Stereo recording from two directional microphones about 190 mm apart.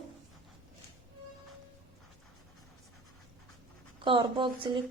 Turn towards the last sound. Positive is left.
turn(degrees=-25)  # may be behind; listen again after turning